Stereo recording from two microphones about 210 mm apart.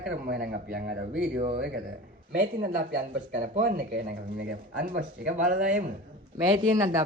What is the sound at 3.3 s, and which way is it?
Speech, 35° right (ahead or behind).